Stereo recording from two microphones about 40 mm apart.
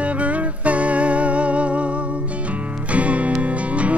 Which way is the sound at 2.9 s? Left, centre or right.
Right.